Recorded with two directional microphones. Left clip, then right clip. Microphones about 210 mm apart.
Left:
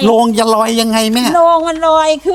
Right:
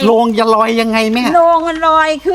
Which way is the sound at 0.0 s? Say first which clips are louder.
Even; 55° left (ahead or behind).